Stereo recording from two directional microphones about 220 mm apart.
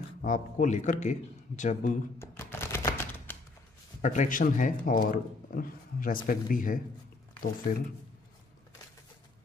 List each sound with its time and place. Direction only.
0.2 s speech: 35° left (ahead or behind)
2.1 s music: 10° left (ahead or behind)
4.0 s speech: 35° left (ahead or behind)